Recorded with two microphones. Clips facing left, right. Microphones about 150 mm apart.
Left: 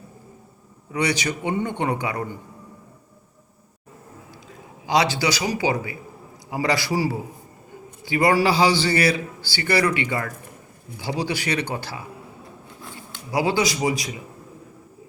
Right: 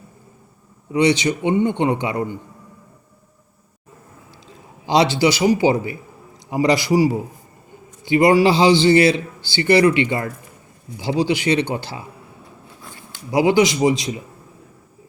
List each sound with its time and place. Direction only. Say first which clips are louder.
0.9 s a man's voice: right 7 dB; 25° right (ahead or behind)
4.9 s a man's voice: right 5 dB; 25° right (ahead or behind)
13.3 s a man's voice: right 6 dB; 20° right (ahead or behind)